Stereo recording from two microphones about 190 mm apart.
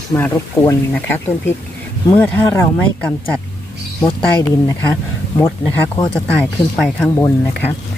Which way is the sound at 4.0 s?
20° left (ahead or behind).